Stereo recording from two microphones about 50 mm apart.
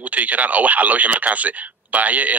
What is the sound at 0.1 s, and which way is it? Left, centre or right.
Speech, right.